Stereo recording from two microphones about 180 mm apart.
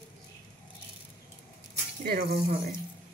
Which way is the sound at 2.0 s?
60° right (ahead or behind).